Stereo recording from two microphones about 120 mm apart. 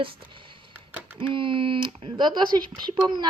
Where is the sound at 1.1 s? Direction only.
45° right (ahead or behind).